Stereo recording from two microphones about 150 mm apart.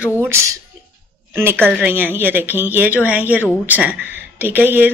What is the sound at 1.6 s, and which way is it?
Speech, 10° right (ahead or behind).